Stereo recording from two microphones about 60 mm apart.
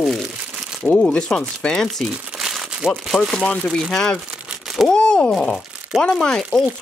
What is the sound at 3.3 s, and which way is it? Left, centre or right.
A woman's voice, centre.